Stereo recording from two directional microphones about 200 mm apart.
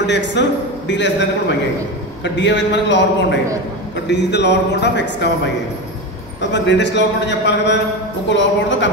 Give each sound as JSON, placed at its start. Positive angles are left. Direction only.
{"t": 0.0, "sound": "a man's voice", "side_deg": 60}
{"t": 2.2, "sound": "a man's voice", "side_deg": 65}
{"t": 6.5, "sound": "a man's voice", "side_deg": 60}